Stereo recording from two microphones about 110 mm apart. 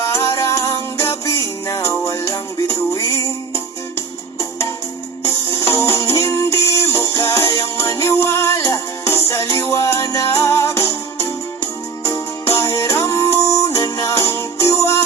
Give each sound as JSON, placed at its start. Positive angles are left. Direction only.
{"t": 0.0, "sound": "music", "side_deg": 25}